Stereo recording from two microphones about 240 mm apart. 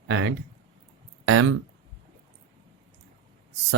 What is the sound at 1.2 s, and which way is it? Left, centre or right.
Speech, right.